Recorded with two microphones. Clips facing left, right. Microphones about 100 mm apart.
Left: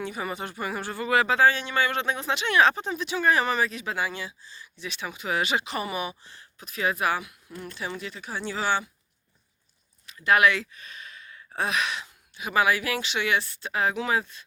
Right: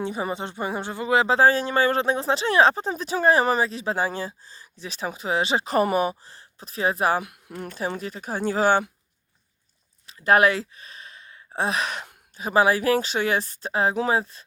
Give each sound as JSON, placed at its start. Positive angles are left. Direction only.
{"t": 0.0, "sound": "speech", "side_deg": -30}
{"t": 1.4, "sound": "speech", "side_deg": -35}
{"t": 7.2, "sound": "speech", "side_deg": -55}
{"t": 10.1, "sound": "speech", "side_deg": -35}